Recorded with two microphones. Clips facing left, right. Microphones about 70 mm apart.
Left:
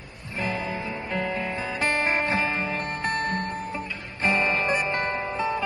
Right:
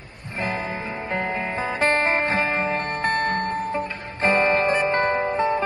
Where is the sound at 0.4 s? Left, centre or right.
Right.